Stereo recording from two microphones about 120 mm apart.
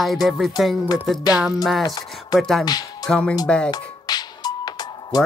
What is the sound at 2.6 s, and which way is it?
Speech, 35° left (ahead or behind).